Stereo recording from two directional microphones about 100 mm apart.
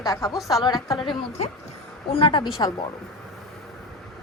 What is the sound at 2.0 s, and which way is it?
Speech, 60° left (ahead or behind).